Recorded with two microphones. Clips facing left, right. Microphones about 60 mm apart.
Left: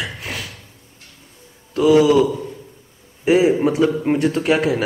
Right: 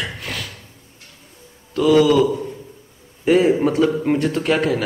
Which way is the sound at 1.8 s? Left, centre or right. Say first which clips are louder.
Left 1 dB; left.